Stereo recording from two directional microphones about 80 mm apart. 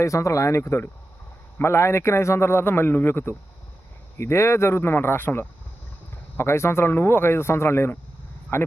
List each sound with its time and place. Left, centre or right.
0.0 s a man's voice: left